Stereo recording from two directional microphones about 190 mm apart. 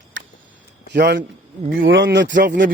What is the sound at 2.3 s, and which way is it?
Speech, 45° right (ahead or behind).